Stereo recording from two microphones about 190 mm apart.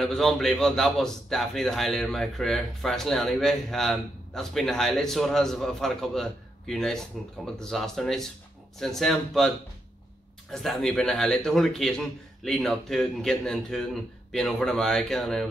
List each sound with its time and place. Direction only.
0.0 s a man's voice: centre (ahead or behind)
10.5 s a man's voice: centre (ahead or behind)